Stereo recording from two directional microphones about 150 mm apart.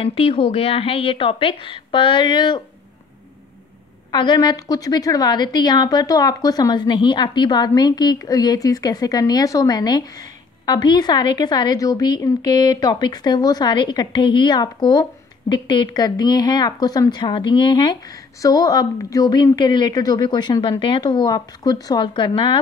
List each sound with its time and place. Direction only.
0.0 s speech: 40° left (ahead or behind)
4.1 s a woman's voice: 30° left (ahead or behind)